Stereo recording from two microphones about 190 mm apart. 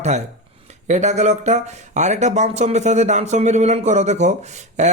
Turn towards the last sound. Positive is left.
turn(degrees=-35)  # may be behind; listen again after turning